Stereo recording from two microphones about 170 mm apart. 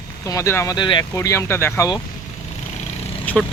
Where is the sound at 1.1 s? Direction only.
15° left (ahead or behind).